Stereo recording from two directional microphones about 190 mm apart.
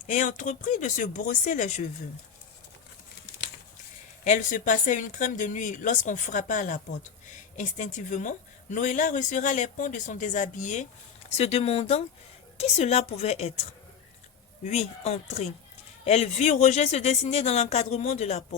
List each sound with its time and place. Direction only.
0.0 s speech: 40° left (ahead or behind)
4.2 s a woman's voice: 40° left (ahead or behind)
14.6 s speech: 35° left (ahead or behind)